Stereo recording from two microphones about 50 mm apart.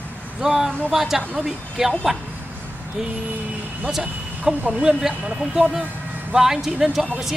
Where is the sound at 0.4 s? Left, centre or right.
Centre.